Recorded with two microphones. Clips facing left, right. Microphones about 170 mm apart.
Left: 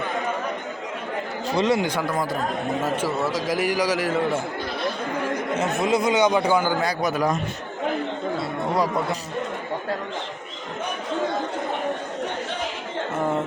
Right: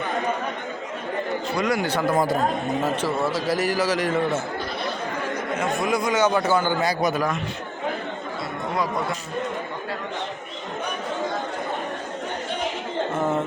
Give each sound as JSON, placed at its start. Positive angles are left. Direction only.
{"t": 1.5, "sound": "speech", "side_deg": 25}
{"t": 3.2, "sound": "speech", "side_deg": 10}
{"t": 5.5, "sound": "speech", "side_deg": 20}
{"t": 6.8, "sound": "a man's voice", "side_deg": 0}